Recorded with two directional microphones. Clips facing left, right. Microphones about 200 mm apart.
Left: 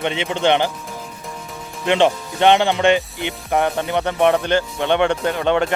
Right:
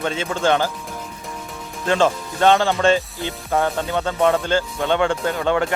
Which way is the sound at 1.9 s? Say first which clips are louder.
Left 2 dB; 20° left (ahead or behind).